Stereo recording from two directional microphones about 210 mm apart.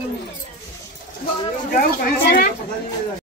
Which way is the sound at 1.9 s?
45° left (ahead or behind).